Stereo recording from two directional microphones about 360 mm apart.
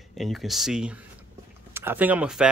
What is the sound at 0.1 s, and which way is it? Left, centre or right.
Speech, centre.